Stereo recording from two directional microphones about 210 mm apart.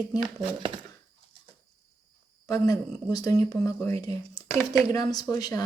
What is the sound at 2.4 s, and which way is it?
Speech, 15° left (ahead or behind).